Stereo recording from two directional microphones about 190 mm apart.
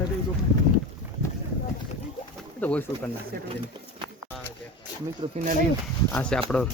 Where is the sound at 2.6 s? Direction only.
10° left (ahead or behind).